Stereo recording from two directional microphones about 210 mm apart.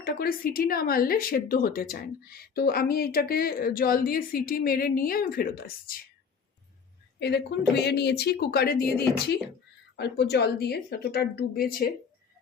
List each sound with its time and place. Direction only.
0.0 s speech: 45° left (ahead or behind)
7.2 s speech: 50° left (ahead or behind)